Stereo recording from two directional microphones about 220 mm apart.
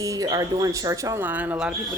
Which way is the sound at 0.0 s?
15° right (ahead or behind).